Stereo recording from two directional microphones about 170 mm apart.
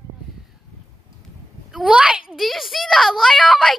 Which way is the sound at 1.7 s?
5° right (ahead or behind).